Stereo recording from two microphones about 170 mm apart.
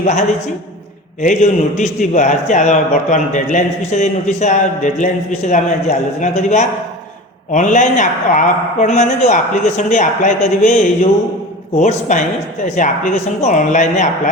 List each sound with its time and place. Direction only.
0.0 s a man's voice: 40° left (ahead or behind)